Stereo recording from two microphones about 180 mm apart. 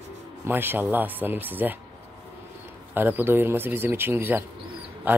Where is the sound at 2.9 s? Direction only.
10° right (ahead or behind).